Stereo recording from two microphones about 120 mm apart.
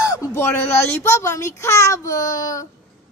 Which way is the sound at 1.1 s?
25° left (ahead or behind).